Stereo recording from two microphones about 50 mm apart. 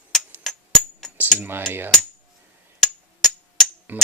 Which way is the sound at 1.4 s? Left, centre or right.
Right.